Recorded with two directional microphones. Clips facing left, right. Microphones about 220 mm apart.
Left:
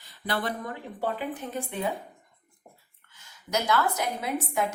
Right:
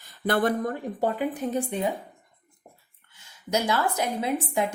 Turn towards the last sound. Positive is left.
turn(degrees=-30)  # may be behind; listen again after turning